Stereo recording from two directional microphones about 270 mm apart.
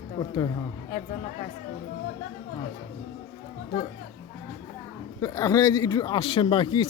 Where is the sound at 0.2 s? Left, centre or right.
Centre.